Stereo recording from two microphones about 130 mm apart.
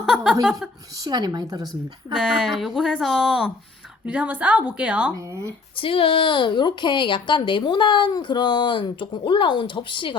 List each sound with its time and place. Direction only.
0.0 s chuckle: 5° right (ahead or behind)
1.0 s a woman's voice: 30° right (ahead or behind)
2.1 s a woman's voice: centre (ahead or behind)
5.1 s speech: 25° right (ahead or behind)
5.7 s speech: 45° left (ahead or behind)